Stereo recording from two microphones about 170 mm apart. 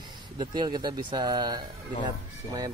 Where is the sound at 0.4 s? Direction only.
25° right (ahead or behind).